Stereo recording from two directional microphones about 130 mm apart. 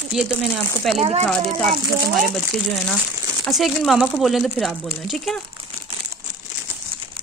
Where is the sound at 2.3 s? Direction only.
5° left (ahead or behind).